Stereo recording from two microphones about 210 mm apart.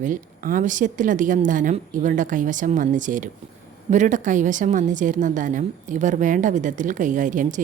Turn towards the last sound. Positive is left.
turn(degrees=-35)  # may be behind; listen again after turning